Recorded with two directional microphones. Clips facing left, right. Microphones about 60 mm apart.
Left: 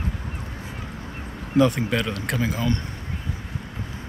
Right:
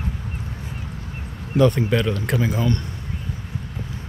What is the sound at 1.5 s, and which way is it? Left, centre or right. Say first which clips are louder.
Speech: right 2 dB; centre.